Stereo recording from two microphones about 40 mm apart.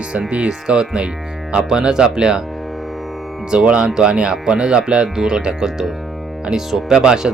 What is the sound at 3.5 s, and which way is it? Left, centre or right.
Speech, right.